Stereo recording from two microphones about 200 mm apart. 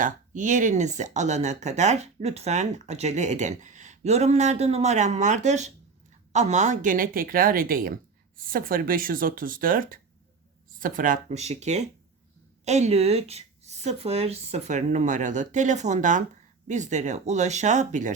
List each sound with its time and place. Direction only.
0.0 s speech: 40° right (ahead or behind)